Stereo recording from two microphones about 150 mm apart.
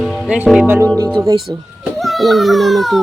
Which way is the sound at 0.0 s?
Centre (ahead or behind).